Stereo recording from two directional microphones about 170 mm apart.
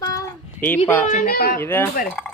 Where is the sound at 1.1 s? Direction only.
60° left (ahead or behind).